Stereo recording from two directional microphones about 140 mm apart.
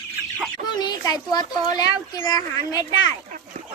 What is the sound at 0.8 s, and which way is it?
A child's voice, 30° left (ahead or behind).